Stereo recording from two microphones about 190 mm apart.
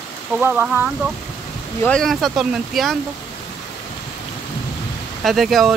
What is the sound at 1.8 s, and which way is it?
Speech, 5° left (ahead or behind).